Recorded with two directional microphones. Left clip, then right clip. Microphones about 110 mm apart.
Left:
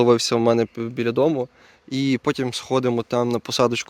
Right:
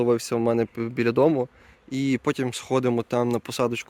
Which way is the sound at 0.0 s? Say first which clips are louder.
Left 5 dB; 45° left (ahead or behind).